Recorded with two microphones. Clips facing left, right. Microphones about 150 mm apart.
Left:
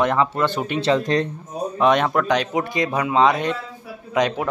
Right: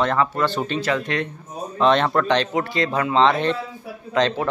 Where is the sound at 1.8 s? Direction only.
10° left (ahead or behind).